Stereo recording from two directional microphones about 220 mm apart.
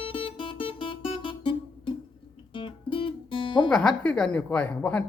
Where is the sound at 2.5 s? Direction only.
25° left (ahead or behind).